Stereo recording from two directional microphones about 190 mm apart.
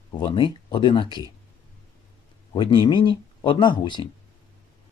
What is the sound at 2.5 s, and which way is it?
Speech, 25° left (ahead or behind).